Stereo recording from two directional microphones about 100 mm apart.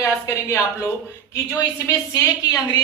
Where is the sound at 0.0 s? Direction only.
30° left (ahead or behind).